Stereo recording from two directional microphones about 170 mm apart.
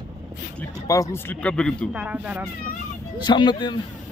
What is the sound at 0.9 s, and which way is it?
Speech, 20° left (ahead or behind).